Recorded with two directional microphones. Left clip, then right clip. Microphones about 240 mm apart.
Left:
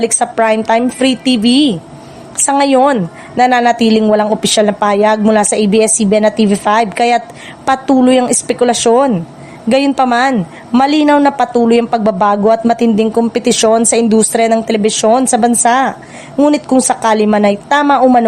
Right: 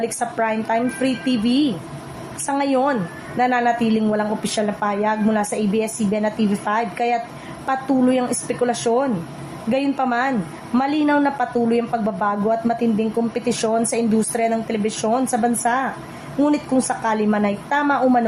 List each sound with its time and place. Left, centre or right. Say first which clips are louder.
0.0 s speech: left 10 dB; left